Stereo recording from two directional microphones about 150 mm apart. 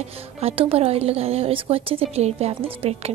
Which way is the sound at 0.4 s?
40° right (ahead or behind).